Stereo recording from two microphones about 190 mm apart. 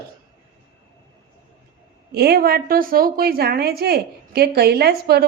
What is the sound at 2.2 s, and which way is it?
A woman's voice, 55° right (ahead or behind).